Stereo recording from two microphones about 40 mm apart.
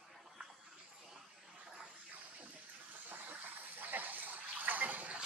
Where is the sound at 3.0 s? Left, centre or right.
Right.